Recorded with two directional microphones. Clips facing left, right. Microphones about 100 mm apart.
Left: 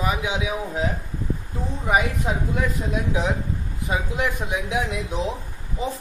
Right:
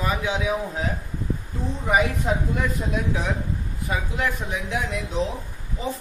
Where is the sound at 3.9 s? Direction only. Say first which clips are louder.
Left 1 dB; 15° left (ahead or behind).